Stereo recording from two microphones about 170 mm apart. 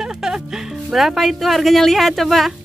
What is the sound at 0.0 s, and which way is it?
Speech, 5° right (ahead or behind).